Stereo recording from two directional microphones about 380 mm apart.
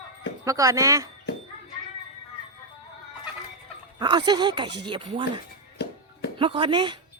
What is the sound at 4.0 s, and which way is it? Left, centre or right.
Speech, centre.